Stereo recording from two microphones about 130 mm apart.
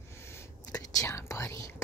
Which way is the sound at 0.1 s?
20° left (ahead or behind).